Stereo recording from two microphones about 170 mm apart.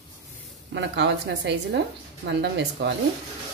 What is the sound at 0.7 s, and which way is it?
A woman's voice, 90° right.